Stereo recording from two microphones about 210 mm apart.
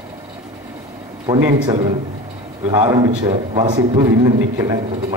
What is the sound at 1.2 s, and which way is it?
Speech, 20° right (ahead or behind).